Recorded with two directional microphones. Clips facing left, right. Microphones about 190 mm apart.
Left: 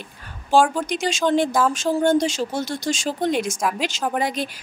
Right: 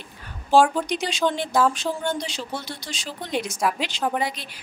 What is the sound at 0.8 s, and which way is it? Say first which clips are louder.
Speech: left 2 dB; 45° left (ahead or behind).